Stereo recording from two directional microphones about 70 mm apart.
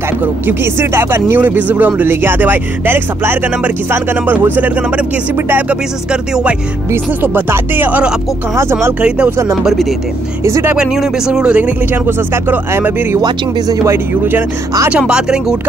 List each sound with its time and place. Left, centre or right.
0.5 s speech: right
7.2 s speech: right
10.8 s speech: centre
12.4 s speech: right
14.9 s speech: centre